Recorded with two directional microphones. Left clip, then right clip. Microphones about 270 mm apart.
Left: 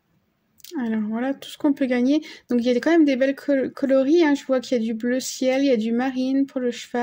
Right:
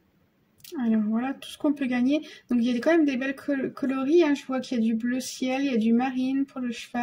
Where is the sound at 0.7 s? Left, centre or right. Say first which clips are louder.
Left 1 dB; left.